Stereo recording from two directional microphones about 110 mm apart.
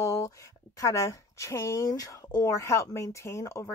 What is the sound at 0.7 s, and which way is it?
Speech, 30° left (ahead or behind).